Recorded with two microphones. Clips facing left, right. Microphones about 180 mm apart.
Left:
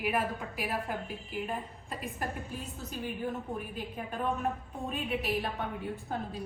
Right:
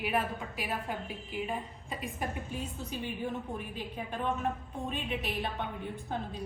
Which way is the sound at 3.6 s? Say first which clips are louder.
Even; centre (ahead or behind).